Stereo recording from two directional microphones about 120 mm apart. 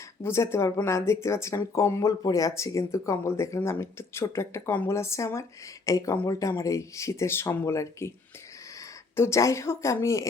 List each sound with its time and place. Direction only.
0.2 s speech: 20° left (ahead or behind)